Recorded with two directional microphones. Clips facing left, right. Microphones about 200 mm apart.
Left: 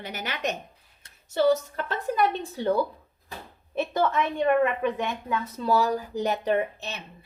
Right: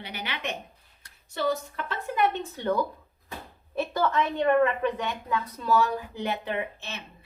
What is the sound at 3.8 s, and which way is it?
A woman's voice, 20° left (ahead or behind).